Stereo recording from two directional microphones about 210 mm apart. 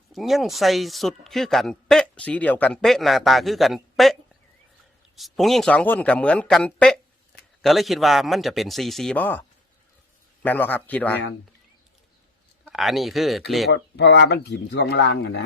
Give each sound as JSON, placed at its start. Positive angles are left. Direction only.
{"t": 0.1, "sound": "speech", "side_deg": 0}
{"t": 10.4, "sound": "speech", "side_deg": 10}
{"t": 12.6, "sound": "speech", "side_deg": 0}
{"t": 13.7, "sound": "speech", "side_deg": 55}